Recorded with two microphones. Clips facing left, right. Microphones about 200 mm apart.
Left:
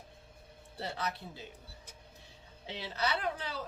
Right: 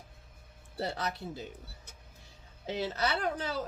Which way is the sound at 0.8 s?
45° right (ahead or behind).